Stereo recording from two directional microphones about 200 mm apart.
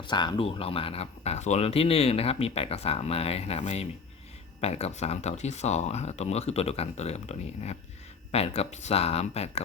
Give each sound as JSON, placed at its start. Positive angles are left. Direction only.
{"t": 0.1, "sound": "speech", "side_deg": 20}